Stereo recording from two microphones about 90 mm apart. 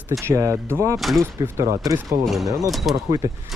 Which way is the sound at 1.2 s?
35° right (ahead or behind).